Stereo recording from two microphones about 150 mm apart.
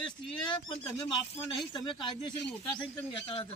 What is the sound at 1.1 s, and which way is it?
Speech, 30° left (ahead or behind).